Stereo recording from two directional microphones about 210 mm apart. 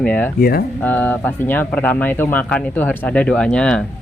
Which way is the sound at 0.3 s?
45° left (ahead or behind).